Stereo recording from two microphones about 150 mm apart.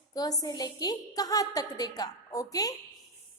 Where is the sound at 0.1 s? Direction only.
25° left (ahead or behind).